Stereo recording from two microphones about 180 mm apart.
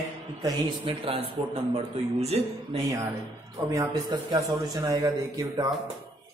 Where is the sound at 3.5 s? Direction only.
20° right (ahead or behind).